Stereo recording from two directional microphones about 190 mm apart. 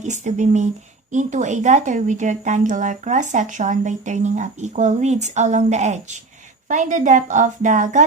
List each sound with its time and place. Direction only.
0.0 s a woman's voice: 40° right (ahead or behind)